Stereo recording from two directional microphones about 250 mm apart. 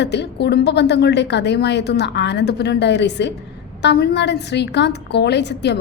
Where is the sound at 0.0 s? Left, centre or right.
Left.